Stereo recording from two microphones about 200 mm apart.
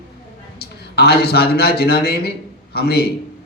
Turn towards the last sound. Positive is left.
turn(degrees=55)  # may be behind; listen again after turning